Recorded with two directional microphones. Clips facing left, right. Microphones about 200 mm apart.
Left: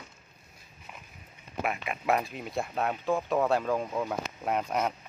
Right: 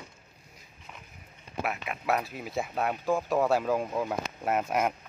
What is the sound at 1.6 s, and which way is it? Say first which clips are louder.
Speech: left 1 dB; centre (ahead or behind).